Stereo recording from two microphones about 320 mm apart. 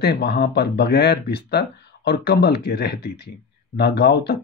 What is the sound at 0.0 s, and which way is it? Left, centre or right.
Speech, left.